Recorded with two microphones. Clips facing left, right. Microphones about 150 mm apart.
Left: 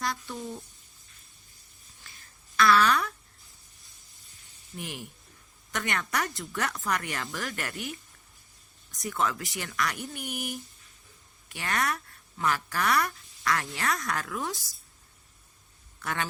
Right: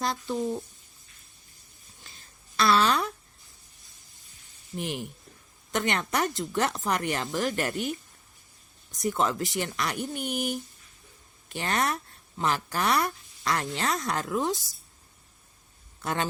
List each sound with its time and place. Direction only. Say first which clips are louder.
0.0 s speech: right 5 dB; 25° right (ahead or behind)
2.0 s a sound: even; 25° right (ahead or behind)
4.8 s speech: right 6 dB; 30° right (ahead or behind)
16.0 s speech: right 3 dB; 25° right (ahead or behind)